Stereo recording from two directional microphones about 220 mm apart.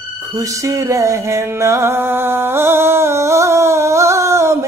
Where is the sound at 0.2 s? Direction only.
15° right (ahead or behind).